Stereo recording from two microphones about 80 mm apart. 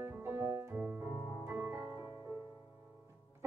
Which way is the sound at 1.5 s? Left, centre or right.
Right.